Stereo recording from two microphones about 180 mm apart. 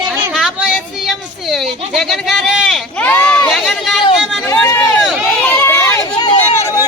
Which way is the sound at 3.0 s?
10° left (ahead or behind).